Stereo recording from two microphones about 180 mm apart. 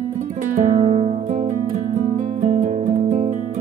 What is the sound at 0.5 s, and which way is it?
Music, 45° right (ahead or behind).